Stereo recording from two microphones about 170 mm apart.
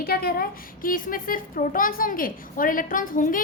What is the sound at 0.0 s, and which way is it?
A child's voice, 65° left (ahead or behind).